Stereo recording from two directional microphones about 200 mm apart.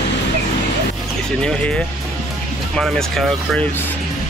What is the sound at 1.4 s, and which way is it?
Speech, 5° left (ahead or behind).